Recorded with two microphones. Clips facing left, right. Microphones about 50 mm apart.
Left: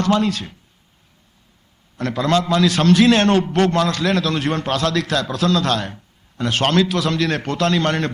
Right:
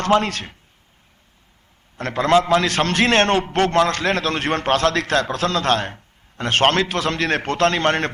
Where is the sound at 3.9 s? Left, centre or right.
Right.